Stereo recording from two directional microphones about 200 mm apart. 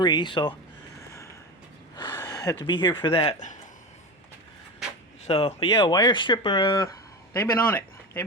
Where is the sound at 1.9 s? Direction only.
20° left (ahead or behind).